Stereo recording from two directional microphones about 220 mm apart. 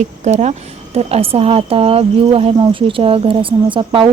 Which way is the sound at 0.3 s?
30° right (ahead or behind).